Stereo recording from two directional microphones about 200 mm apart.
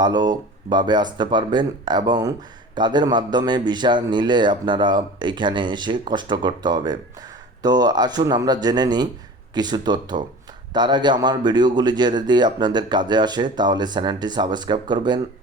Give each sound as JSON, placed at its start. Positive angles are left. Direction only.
{"t": 0.0, "sound": "speech", "side_deg": -20}